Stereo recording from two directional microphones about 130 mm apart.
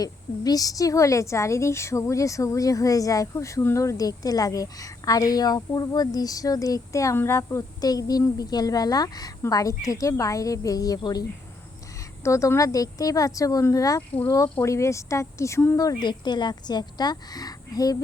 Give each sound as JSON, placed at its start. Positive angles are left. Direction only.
{"t": 0.0, "sound": "a woman's voice", "side_deg": 30}